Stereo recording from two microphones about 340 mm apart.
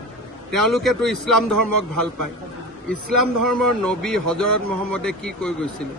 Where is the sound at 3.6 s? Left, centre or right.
Centre.